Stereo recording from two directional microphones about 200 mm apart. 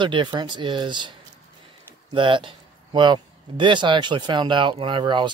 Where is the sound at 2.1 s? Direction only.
25° right (ahead or behind).